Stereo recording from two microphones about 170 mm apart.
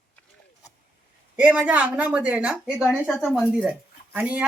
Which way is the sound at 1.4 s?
5° right (ahead or behind).